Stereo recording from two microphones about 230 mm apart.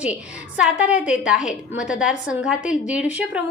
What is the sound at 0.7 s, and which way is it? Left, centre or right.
Speech, left.